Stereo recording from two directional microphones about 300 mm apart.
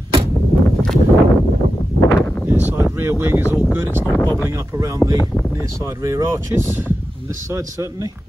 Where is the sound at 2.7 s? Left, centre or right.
Centre.